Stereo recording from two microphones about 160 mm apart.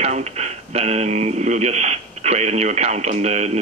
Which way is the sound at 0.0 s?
45° right (ahead or behind).